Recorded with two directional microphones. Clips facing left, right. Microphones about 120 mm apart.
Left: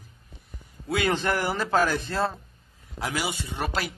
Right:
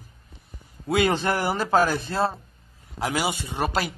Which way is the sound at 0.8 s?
15° right (ahead or behind).